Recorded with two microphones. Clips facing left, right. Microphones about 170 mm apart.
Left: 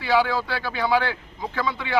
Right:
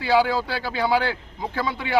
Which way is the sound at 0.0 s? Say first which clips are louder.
Right 2 dB; 30° right (ahead or behind).